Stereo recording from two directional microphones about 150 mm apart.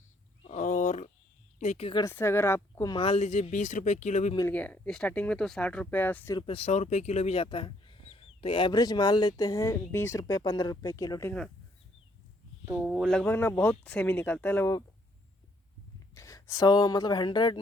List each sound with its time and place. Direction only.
0.4 s wild animals: 55° left (ahead or behind)
1.5 s speech: 45° left (ahead or behind)
2.0 s speech: 15° left (ahead or behind)
2.9 s speech: 40° left (ahead or behind)
4.5 s speech: 10° left (ahead or behind)
6.3 s speech: 35° left (ahead or behind)
11.3 s speech: 5° left (ahead or behind)
12.6 s speech: 5° right (ahead or behind); by 14.8 s 20° left (ahead or behind)
16.1 s speech: 20° left (ahead or behind)